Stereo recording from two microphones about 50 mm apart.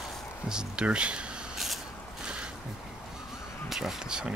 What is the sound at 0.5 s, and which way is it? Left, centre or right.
Speech, centre.